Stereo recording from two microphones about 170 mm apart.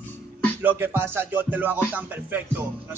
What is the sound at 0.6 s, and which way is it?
Music, 10° right (ahead or behind).